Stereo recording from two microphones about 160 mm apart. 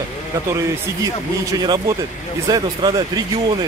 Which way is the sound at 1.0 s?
25° right (ahead or behind).